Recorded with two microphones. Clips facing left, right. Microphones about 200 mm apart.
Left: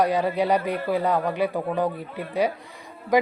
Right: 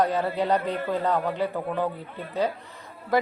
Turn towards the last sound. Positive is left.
turn(degrees=15)  # may be behind; listen again after turning